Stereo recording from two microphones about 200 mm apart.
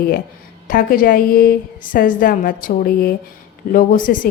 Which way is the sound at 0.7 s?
45° left (ahead or behind).